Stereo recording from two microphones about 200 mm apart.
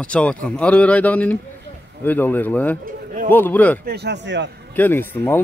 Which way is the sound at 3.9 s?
55° right (ahead or behind).